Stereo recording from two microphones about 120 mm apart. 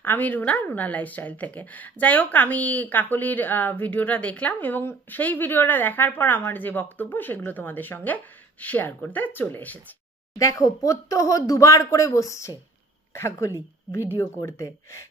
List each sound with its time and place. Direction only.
0.0 s speech: 15° left (ahead or behind)
10.3 s a woman's voice: 30° left (ahead or behind)